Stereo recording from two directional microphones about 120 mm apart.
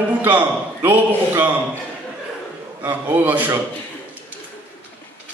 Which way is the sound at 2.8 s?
15° right (ahead or behind).